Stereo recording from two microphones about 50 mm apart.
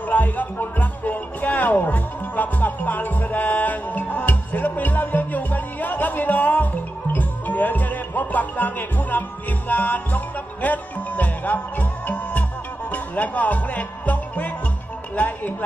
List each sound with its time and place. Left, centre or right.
0.1 s music: left
15.1 s speech: left